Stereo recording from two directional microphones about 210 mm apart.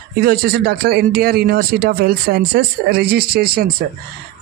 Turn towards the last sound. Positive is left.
turn(degrees=-45)  # may be behind; listen again after turning